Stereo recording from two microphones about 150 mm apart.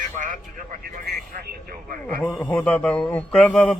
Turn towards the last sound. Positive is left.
turn(degrees=10)  # may be behind; listen again after turning